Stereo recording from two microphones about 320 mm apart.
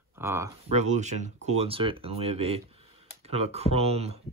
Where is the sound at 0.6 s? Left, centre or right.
Right.